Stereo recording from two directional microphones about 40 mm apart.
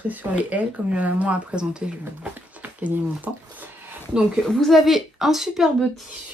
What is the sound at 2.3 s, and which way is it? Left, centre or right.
Speech, right.